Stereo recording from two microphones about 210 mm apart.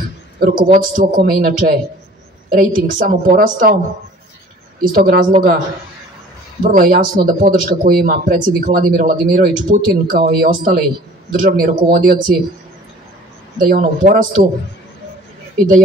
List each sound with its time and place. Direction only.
0.4 s a woman's voice: 40° right (ahead or behind)
6.6 s speech: 45° right (ahead or behind)
13.6 s a woman's voice: 40° right (ahead or behind)